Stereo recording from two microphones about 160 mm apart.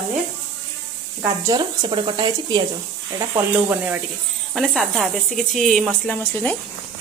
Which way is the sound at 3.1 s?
15° right (ahead or behind).